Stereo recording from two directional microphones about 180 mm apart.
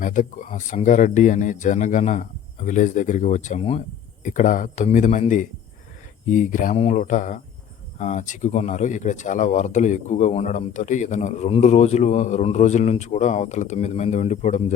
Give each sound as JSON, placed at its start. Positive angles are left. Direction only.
{"t": 0.0, "sound": "speech", "side_deg": 45}